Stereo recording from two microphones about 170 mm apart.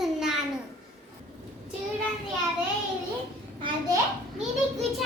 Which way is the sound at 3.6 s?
25° right (ahead or behind).